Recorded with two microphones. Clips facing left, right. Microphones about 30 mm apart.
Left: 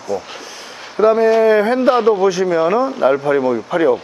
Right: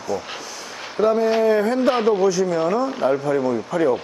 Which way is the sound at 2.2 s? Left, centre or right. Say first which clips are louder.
Left 4 dB; left.